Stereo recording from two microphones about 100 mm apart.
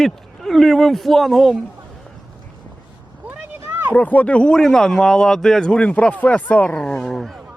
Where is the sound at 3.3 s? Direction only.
20° right (ahead or behind).